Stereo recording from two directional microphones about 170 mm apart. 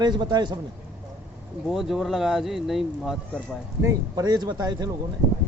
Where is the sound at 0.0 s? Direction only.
25° right (ahead or behind).